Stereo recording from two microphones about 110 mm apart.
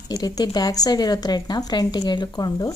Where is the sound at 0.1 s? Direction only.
35° left (ahead or behind).